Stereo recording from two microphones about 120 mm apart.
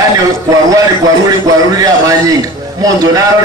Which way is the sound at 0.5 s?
30° right (ahead or behind).